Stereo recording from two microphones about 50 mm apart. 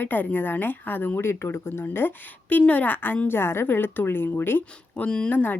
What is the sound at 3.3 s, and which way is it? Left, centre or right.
A woman's voice, left.